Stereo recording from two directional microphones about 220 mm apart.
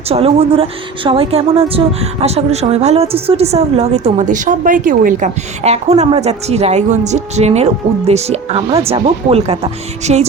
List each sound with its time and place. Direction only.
0.1 s speech: 25° right (ahead or behind)